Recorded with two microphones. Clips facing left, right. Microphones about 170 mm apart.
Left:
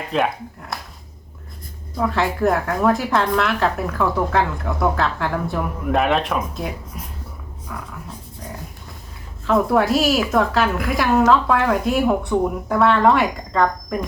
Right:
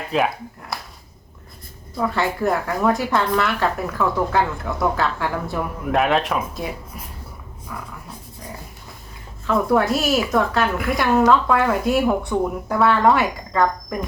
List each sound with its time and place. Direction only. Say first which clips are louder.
0.1 s a woman's voice: even; 5° right (ahead or behind)
0.7 s a sound: even; centre (ahead or behind)
2.0 s a woman's voice: left 2 dB; centre (ahead or behind)
7.7 s a woman's voice: left 1 dB; centre (ahead or behind)
9.5 s a woman's voice: left 1 dB; centre (ahead or behind)